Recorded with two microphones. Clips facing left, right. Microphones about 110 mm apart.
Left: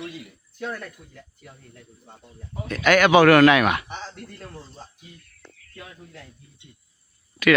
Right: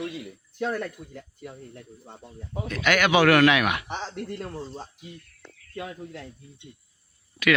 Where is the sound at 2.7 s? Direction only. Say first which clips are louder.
Left 5 dB; 45° left (ahead or behind).